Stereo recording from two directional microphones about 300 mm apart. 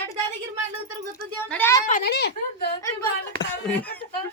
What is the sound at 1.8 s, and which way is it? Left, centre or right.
Speech, left.